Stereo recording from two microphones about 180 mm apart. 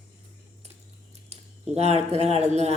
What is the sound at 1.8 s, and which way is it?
Speech, 35° right (ahead or behind).